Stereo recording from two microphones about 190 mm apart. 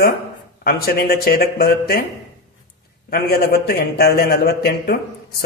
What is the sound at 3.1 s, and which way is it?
A man's voice, 55° left (ahead or behind).